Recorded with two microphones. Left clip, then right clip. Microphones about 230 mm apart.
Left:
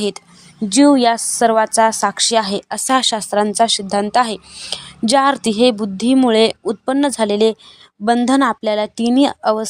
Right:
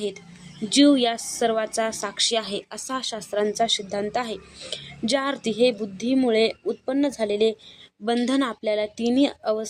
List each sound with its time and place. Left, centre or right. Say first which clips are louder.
0.7 s a woman's voice: left 7 dB; left